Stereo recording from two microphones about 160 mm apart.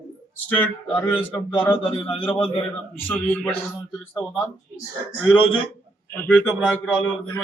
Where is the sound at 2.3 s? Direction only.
35° left (ahead or behind).